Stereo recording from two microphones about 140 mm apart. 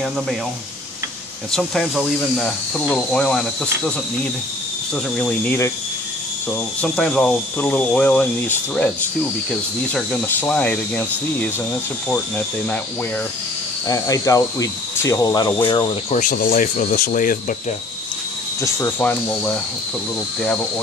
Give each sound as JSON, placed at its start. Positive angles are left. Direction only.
{"t": 1.5, "sound": "speech", "side_deg": 0}
{"t": 6.8, "sound": "speech", "side_deg": 5}
{"t": 10.5, "sound": "speech", "side_deg": 10}
{"t": 12.1, "sound": "speech", "side_deg": 10}
{"t": 13.8, "sound": "speech", "side_deg": 25}
{"t": 16.1, "sound": "speech", "side_deg": 70}
{"t": 16.6, "sound": "speech", "side_deg": 65}
{"t": 18.6, "sound": "speech", "side_deg": 15}